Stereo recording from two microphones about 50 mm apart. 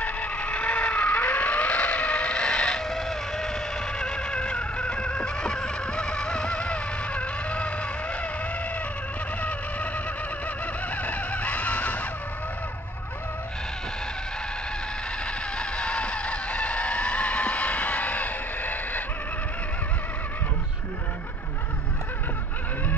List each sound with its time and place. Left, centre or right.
0.0 s vehicle: left; by 3.4 s centre
4.0 s a sound: centre
11.0 s vehicle: left
15.5 s chicken: left